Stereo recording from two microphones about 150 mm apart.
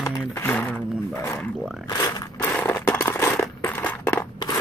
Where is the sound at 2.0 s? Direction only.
20° left (ahead or behind).